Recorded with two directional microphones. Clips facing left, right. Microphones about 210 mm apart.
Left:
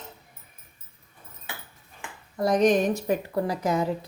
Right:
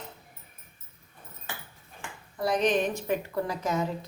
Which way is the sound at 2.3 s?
45° left (ahead or behind).